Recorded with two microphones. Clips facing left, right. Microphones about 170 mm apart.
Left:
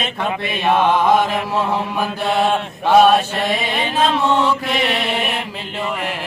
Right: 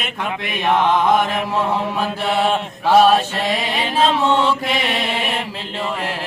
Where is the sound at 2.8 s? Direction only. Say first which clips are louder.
Left 1 dB; 5° right (ahead or behind).